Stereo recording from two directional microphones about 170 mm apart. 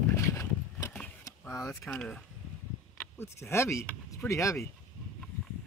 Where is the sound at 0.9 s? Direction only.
10° left (ahead or behind).